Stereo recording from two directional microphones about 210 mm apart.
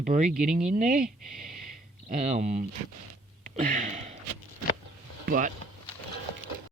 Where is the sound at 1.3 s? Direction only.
40° right (ahead or behind).